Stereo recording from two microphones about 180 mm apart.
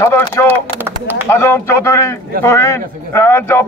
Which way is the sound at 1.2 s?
15° left (ahead or behind).